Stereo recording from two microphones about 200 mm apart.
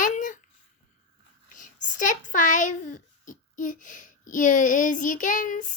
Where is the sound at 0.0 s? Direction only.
40° left (ahead or behind).